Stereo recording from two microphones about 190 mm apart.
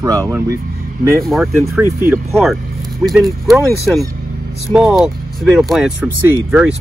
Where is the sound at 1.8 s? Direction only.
15° right (ahead or behind).